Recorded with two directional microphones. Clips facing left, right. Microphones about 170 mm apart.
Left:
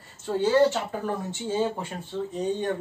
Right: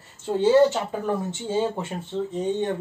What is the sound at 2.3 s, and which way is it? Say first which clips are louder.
Speech: right 2 dB; 25° right (ahead or behind).